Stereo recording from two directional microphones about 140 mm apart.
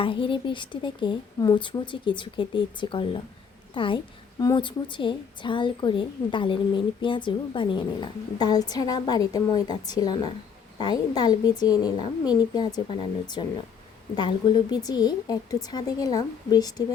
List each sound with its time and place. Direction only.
0.0 s a woman's voice: 35° left (ahead or behind)